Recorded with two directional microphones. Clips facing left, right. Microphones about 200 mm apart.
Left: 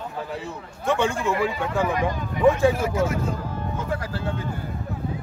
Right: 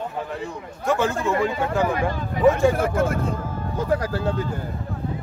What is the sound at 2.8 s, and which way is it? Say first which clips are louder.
Speech: right 2 dB; 55° right (ahead or behind).